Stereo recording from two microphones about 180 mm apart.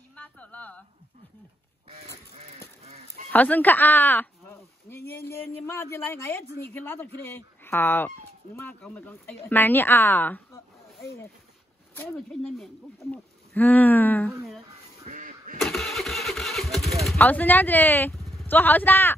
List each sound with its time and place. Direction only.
0.1 s a sound: 10° left (ahead or behind)
2.8 s a sound: 35° right (ahead or behind)
3.3 s speech: 10° left (ahead or behind)
11.9 s speech: 5° left (ahead or behind)
15.0 s quack: 45° right (ahead or behind)
15.6 s engine starting: centre (ahead or behind)
18.3 s speech: 5° left (ahead or behind)